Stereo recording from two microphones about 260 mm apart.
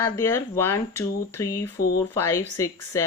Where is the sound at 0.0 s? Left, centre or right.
Centre.